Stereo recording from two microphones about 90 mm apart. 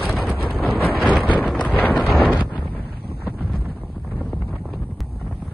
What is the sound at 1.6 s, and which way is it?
Wind noise, 15° left (ahead or behind).